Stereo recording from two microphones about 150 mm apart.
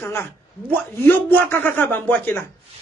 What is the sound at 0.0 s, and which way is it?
Speech, 15° left (ahead or behind).